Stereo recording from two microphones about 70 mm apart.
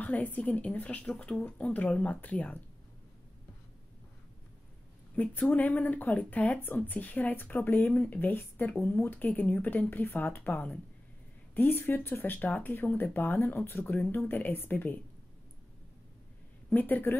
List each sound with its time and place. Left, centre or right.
0.0 s speech: left
5.1 s speech: centre
16.7 s speech: left